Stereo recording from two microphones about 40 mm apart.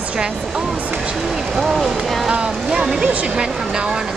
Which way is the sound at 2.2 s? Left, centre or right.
Right.